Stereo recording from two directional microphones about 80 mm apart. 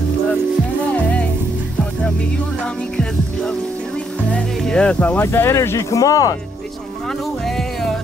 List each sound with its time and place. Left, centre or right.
4.3 s music: centre
5.2 s speech: left
7.4 s music: centre